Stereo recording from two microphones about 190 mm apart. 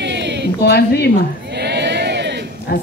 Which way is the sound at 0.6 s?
60° left (ahead or behind).